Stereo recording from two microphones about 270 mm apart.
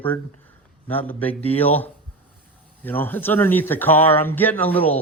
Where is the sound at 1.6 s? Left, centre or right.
Centre.